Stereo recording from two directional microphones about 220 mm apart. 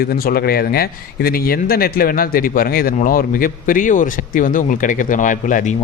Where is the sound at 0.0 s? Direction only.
45° left (ahead or behind).